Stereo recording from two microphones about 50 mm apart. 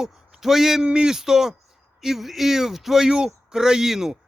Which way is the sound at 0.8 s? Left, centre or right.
Centre.